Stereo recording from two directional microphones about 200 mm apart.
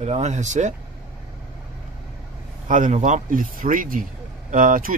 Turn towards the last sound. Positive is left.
turn(degrees=-40)  # may be behind; listen again after turning